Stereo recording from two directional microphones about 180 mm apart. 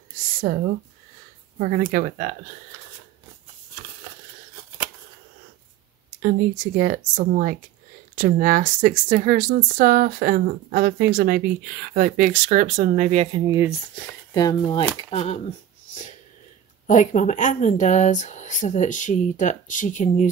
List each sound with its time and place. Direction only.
0.4 s speech: 55° right (ahead or behind)
1.9 s speech: 50° right (ahead or behind)
6.2 s speech: 45° right (ahead or behind)
14.3 s speech: 20° left (ahead or behind)
15.0 s speech: 35° left (ahead or behind)
16.8 s speech: 45° left (ahead or behind)